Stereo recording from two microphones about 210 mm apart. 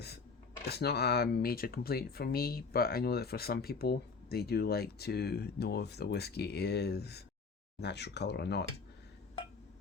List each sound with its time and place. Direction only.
0.6 s speech: 50° left (ahead or behind)